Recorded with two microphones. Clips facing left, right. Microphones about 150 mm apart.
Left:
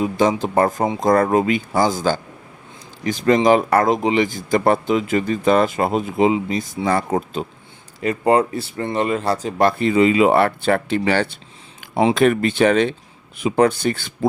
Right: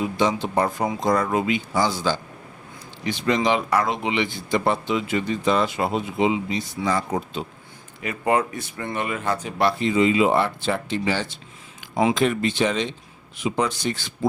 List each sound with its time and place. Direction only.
0.0 s speech: 45° left (ahead or behind)
8.0 s speech: 35° left (ahead or behind); by 14.3 s 55° left (ahead or behind)